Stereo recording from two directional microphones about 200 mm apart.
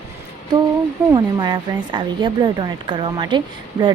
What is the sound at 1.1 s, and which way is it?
Speech, 20° right (ahead or behind).